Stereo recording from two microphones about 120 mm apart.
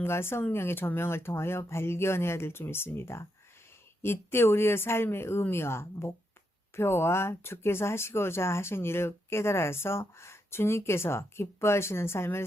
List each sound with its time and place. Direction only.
0.0 s speech: 20° left (ahead or behind)